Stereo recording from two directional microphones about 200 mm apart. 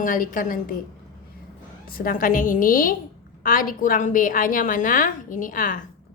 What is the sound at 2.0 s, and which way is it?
A woman's voice, 45° left (ahead or behind).